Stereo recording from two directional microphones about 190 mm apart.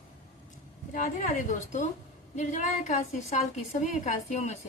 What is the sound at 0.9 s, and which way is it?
A woman's voice, 45° left (ahead or behind).